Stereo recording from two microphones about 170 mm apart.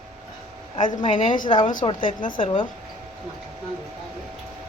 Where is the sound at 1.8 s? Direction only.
30° left (ahead or behind).